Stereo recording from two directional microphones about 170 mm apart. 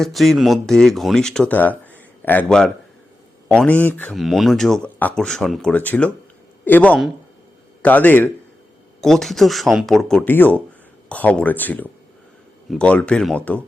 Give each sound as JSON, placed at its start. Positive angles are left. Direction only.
{"t": 0.0, "sound": "speech", "side_deg": 0}